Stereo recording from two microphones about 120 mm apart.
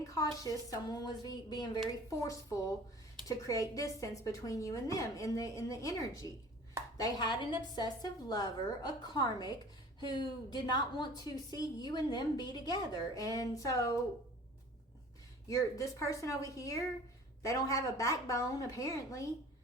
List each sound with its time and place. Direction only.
0.1 s a woman's voice: 30° left (ahead or behind)
15.4 s a woman's voice: 30° left (ahead or behind)